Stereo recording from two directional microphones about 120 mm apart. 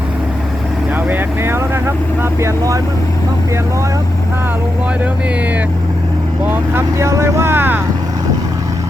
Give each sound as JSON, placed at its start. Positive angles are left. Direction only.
{"t": 1.1, "sound": "speech", "side_deg": -20}
{"t": 6.4, "sound": "speech", "side_deg": -20}